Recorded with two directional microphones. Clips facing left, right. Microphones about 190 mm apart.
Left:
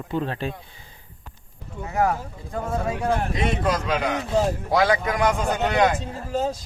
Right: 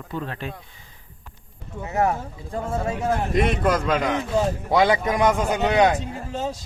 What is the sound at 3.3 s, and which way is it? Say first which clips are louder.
Speech: right 3 dB; 55° right (ahead or behind).